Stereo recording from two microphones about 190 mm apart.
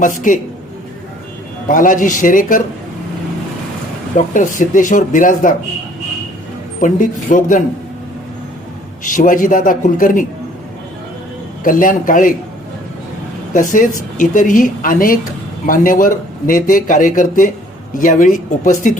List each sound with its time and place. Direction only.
0.0 s a man's voice: 45° left (ahead or behind)
1.6 s a man's voice: 45° left (ahead or behind)
4.4 s a man's voice: 45° left (ahead or behind)
6.7 s a man's voice: 45° left (ahead or behind)
9.0 s a man's voice: 45° left (ahead or behind)
11.6 s a man's voice: 45° left (ahead or behind)
13.5 s a man's voice: 45° left (ahead or behind)